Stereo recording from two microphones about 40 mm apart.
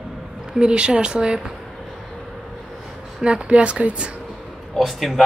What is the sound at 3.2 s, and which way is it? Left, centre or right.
Speech, right.